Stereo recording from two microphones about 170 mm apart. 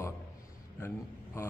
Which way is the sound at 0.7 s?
15° left (ahead or behind).